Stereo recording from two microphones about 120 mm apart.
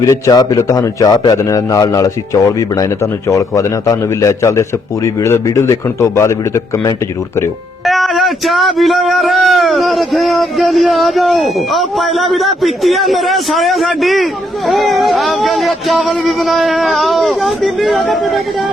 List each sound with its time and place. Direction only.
0.0 s a man's voice: 30° left (ahead or behind)
7.9 s speech: centre (ahead or behind)